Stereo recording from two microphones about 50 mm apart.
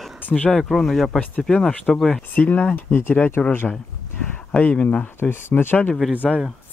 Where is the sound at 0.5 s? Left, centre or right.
Centre.